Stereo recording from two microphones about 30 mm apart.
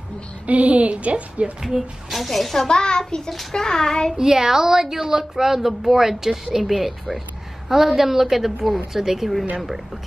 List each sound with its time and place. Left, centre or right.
0.5 s a woman's voice: right
1.6 s speech: centre
2.1 s speech: centre
2.7 s a child's voice: left
4.2 s speech: centre
6.6 s speech: centre
7.7 s speech: centre